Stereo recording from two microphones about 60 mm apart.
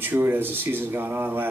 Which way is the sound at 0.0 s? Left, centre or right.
Right.